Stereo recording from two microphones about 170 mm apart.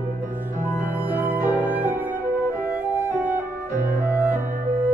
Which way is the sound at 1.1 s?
10° right (ahead or behind).